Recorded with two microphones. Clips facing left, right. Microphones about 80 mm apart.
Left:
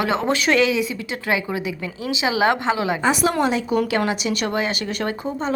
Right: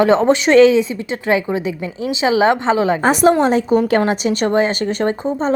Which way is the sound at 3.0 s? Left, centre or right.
Right.